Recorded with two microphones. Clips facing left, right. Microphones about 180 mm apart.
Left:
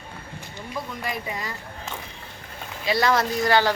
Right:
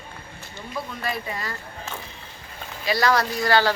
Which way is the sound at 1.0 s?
15° left (ahead or behind).